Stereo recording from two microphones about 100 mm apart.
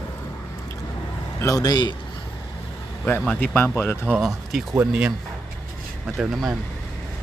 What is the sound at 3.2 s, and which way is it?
Speech, 15° left (ahead or behind).